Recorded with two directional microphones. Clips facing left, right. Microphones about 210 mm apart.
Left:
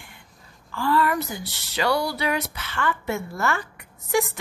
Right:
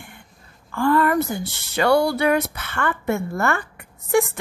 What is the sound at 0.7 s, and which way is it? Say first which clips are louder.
Speech: right 4 dB; 50° right (ahead or behind).